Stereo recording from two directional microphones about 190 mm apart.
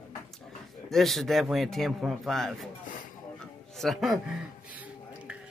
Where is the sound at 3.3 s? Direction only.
Centre (ahead or behind).